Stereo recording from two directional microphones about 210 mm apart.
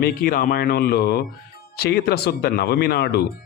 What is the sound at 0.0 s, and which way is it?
Speech, 45° left (ahead or behind).